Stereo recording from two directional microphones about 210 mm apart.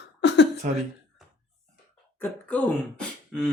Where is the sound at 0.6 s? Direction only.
35° right (ahead or behind).